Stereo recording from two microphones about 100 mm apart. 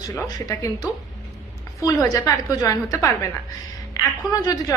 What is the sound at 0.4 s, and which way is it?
A woman's voice, 35° left (ahead or behind).